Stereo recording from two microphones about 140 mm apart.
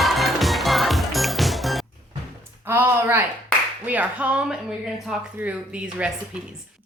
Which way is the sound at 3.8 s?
10° right (ahead or behind).